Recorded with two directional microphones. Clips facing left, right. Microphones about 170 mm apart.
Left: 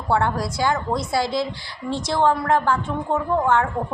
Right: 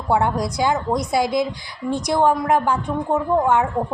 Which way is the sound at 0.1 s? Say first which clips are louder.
Right 2 dB; 20° right (ahead or behind).